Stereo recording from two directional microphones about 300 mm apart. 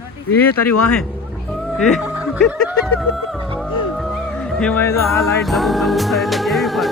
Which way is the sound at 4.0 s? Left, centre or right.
Centre.